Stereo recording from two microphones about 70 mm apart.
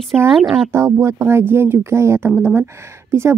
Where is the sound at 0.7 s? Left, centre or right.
Right.